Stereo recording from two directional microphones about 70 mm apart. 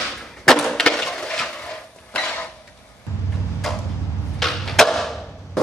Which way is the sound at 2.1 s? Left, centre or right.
Left.